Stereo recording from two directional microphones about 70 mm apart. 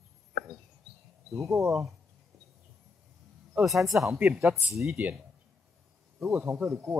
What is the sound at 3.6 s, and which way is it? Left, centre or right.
Speech, centre.